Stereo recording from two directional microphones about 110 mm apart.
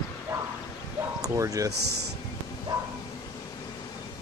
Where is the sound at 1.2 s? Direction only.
30° right (ahead or behind).